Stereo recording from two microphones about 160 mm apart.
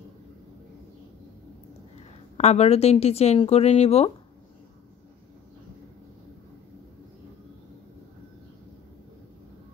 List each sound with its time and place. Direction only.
2.3 s speech: 40° left (ahead or behind)